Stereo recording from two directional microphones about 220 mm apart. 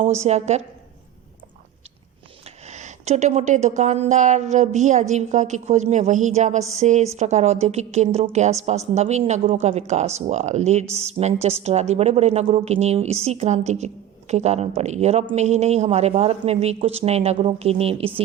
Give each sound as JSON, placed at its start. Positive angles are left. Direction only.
{"t": 0.2, "sound": "a woman's voice", "side_deg": -30}
{"t": 2.6, "sound": "a woman's voice", "side_deg": -30}